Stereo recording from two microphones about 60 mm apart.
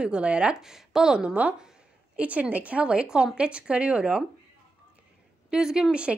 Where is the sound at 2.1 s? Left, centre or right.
Right.